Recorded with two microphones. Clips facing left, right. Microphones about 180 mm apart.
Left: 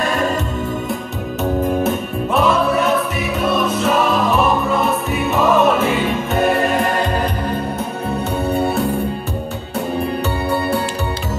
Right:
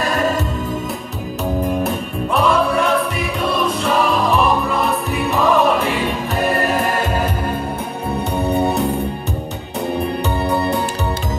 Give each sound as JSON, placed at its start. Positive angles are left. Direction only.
{"t": 1.8, "sound": "music", "side_deg": 0}
{"t": 8.4, "sound": "organ", "side_deg": -15}